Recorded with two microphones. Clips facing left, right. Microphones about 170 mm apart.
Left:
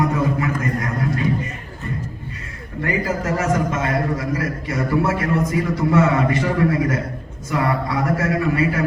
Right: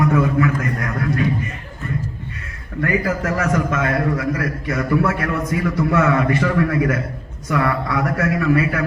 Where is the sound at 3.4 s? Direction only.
30° left (ahead or behind).